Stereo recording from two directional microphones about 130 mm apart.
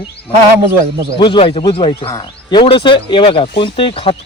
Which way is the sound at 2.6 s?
40° left (ahead or behind).